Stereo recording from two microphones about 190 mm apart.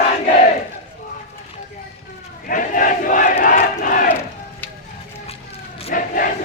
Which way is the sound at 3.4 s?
45° left (ahead or behind).